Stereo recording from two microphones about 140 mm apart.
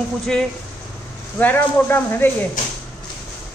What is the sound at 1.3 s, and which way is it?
Speech, 15° left (ahead or behind).